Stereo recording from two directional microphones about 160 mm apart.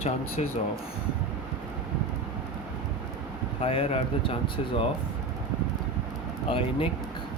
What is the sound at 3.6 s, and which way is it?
Speech, 35° left (ahead or behind).